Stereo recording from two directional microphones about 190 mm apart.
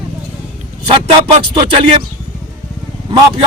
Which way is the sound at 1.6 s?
25° right (ahead or behind).